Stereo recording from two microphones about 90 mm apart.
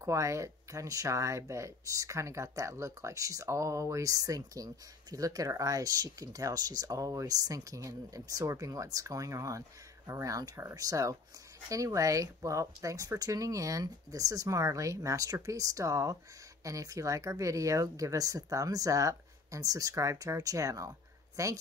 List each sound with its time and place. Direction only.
0.0 s speech: 35° right (ahead or behind)